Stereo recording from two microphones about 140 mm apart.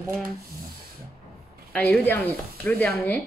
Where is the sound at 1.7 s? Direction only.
10° left (ahead or behind).